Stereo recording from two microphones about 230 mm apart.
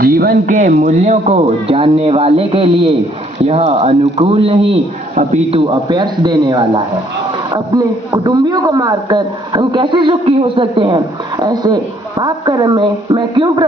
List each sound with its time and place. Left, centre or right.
0.0 s a man's voice: right; by 13.7 s centre